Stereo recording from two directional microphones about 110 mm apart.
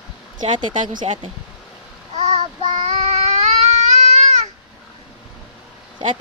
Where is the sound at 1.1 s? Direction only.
70° right (ahead or behind).